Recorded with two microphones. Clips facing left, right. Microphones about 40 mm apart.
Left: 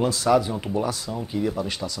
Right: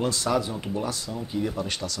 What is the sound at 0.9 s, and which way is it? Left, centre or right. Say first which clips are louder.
Speech: left 3 dB; left.